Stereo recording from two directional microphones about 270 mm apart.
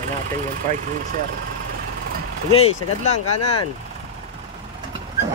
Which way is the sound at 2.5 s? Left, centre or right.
Left.